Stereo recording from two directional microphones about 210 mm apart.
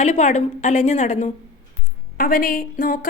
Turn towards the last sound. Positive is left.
turn(degrees=40)  # may be behind; listen again after turning